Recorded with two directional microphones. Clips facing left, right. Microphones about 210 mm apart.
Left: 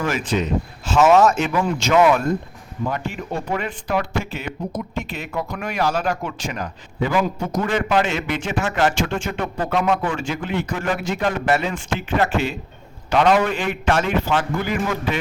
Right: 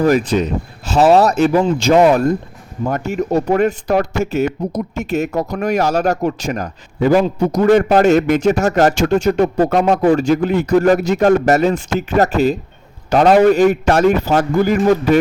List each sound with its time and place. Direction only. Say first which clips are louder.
0.0 s a man's voice: right 8 dB; 40° right (ahead or behind)